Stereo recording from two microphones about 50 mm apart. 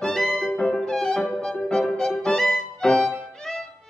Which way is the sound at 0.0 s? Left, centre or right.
Centre.